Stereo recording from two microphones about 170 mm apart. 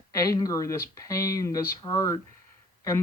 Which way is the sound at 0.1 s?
20° left (ahead or behind).